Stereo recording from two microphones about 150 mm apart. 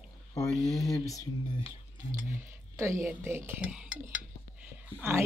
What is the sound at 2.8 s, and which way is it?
Speech, 20° right (ahead or behind).